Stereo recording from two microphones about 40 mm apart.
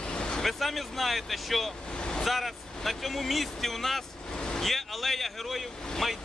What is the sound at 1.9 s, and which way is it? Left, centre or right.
Vehicle, left.